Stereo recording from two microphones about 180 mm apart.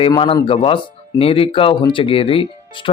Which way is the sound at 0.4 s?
30° left (ahead or behind).